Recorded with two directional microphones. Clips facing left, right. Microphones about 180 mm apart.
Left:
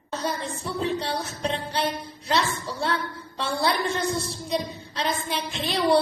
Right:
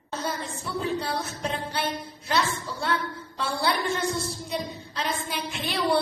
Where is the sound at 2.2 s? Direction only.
30° left (ahead or behind).